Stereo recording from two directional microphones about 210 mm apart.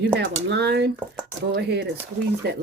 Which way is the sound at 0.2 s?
50° right (ahead or behind).